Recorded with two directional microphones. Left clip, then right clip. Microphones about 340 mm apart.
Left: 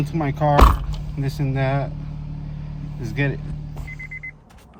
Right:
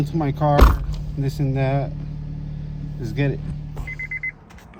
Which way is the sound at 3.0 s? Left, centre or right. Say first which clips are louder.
Even; left.